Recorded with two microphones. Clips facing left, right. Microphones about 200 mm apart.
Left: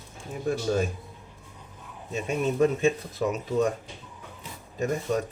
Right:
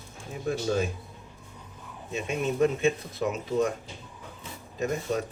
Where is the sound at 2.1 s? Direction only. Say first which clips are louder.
Left 2 dB; 40° left (ahead or behind).